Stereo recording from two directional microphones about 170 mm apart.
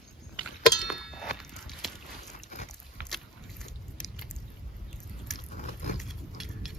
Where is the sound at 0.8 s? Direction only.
Centre (ahead or behind).